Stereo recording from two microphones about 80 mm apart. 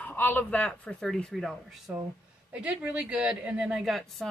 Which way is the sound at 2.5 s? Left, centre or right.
Centre.